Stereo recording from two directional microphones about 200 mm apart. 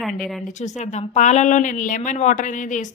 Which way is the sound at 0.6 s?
35° left (ahead or behind).